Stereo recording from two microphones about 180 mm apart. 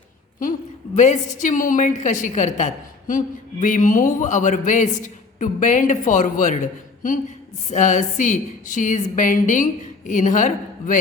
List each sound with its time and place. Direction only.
0.9 s a woman's voice: 45° left (ahead or behind)